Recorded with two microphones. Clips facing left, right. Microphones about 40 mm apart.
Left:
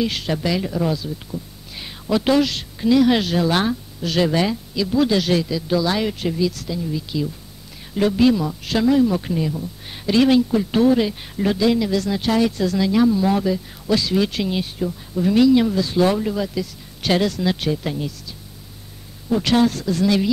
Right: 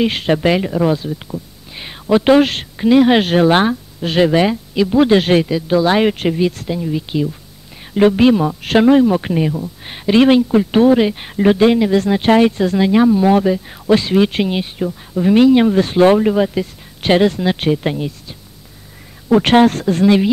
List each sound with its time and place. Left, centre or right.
0.0 s a man's voice: right
1.3 s a woman's voice: right
19.2 s a man's voice: right